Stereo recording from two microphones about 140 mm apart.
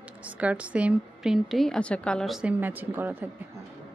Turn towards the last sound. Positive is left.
turn(degrees=-15)  # may be behind; listen again after turning